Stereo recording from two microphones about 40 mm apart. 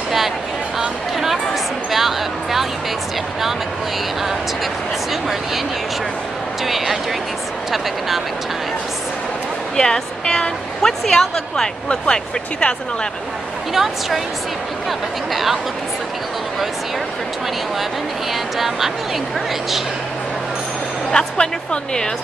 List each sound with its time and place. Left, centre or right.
0.7 s a sound: centre
6.6 s speech: centre
9.8 s speech: centre
14.9 s speech: centre
18.3 s speech: centre
21.1 s speech: left